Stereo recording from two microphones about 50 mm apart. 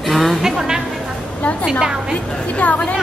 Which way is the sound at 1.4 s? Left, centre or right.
Left.